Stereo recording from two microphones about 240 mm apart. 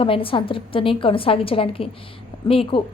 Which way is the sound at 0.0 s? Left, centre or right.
Left.